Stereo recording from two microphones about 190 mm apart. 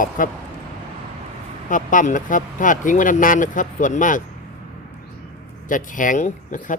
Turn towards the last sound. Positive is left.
turn(degrees=40)  # may be behind; listen again after turning